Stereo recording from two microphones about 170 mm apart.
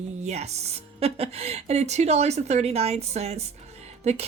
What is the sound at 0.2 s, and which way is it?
Speech, 40° right (ahead or behind).